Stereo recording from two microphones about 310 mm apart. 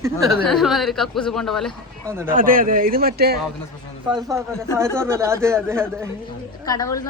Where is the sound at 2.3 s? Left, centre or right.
Right.